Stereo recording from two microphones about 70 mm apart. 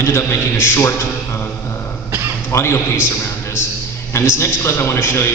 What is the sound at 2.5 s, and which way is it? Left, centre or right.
Speech, left.